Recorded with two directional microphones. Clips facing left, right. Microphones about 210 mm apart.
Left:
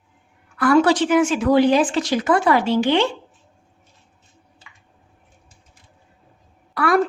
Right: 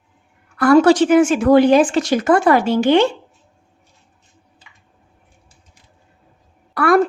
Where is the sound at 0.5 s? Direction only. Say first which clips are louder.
Right 4 dB; 40° right (ahead or behind).